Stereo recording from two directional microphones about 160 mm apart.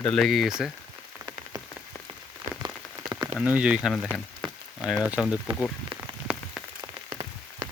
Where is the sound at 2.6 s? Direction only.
25° right (ahead or behind).